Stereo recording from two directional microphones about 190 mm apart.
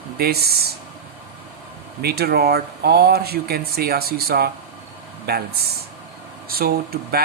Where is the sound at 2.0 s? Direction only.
55° right (ahead or behind).